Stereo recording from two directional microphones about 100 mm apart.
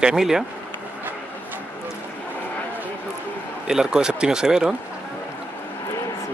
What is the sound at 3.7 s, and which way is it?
Speech, 5° right (ahead or behind).